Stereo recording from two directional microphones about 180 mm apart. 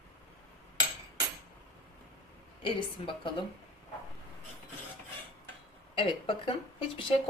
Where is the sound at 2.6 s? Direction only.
30° left (ahead or behind).